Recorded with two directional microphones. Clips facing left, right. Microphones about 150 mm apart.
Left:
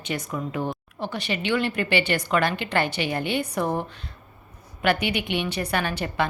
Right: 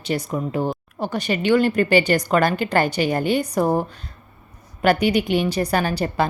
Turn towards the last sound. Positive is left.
turn(degrees=-35)  # may be behind; listen again after turning